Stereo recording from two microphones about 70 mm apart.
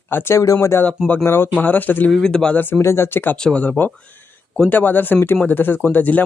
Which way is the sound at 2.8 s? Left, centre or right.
Left.